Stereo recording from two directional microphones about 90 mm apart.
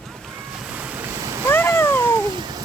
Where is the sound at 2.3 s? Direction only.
55° right (ahead or behind).